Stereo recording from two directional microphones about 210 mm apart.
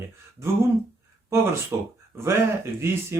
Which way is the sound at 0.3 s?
10° right (ahead or behind).